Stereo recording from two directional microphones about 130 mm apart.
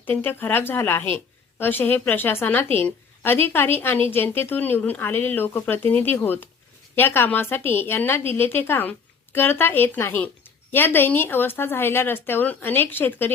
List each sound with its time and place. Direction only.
0.0 s a woman's voice: 15° left (ahead or behind)